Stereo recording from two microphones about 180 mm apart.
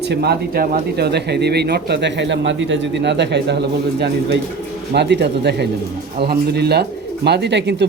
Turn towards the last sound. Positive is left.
turn(degrees=-75)  # may be behind; listen again after turning